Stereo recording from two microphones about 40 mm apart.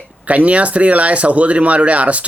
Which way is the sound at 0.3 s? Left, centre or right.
Right.